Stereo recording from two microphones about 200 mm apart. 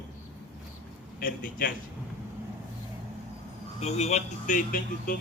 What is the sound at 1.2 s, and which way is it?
Speech, 45° left (ahead or behind).